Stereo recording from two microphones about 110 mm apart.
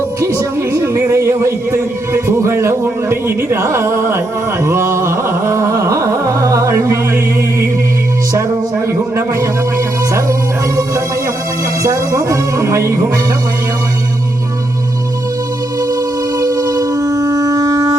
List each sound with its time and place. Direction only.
0.2 s music: 25° right (ahead or behind)
4.6 s carnatic music: 25° right (ahead or behind)
11.8 s speech: 30° right (ahead or behind)
16.4 s shofar: 30° right (ahead or behind)